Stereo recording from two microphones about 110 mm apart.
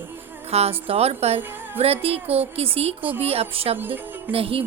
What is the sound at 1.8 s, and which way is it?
A woman's voice, 65° right (ahead or behind).